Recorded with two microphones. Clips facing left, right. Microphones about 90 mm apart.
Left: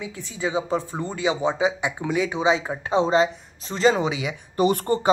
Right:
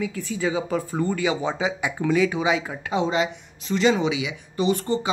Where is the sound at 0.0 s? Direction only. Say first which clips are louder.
Right 3 dB; 20° left (ahead or behind).